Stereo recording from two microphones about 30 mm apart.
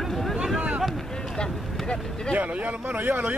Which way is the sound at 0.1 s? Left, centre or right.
Centre.